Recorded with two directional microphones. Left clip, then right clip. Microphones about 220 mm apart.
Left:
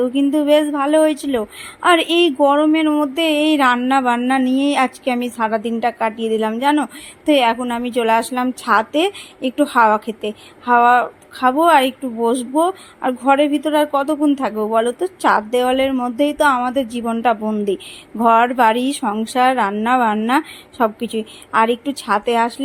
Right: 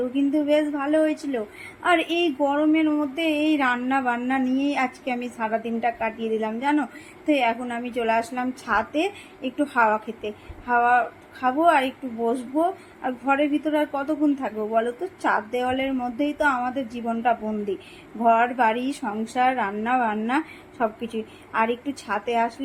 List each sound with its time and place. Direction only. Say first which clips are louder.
0.0 s a woman's voice: left 7 dB; 50° left (ahead or behind)